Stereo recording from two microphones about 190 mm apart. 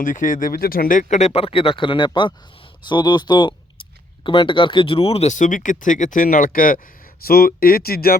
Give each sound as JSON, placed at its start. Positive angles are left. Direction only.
{"t": 0.0, "sound": "speech", "side_deg": 45}